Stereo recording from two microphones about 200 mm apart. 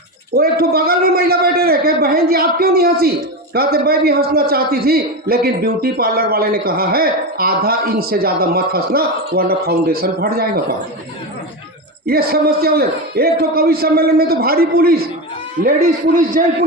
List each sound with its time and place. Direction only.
0.3 s a man's voice: 50° right (ahead or behind)
12.0 s a man's voice: 50° right (ahead or behind)